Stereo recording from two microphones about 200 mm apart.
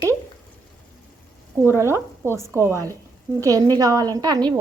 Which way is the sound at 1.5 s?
15° right (ahead or behind).